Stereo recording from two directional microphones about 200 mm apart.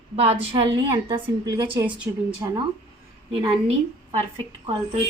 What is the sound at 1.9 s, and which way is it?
Speech, 5° right (ahead or behind).